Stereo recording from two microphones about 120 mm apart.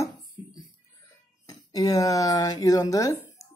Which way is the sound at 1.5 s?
30° left (ahead or behind).